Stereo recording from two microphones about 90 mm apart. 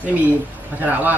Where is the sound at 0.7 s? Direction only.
20° right (ahead or behind).